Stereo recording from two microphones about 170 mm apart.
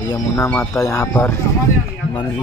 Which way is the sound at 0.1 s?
15° left (ahead or behind).